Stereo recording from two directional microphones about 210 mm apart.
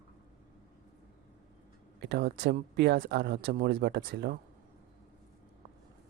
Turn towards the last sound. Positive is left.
turn(degrees=-50)  # may be behind; listen again after turning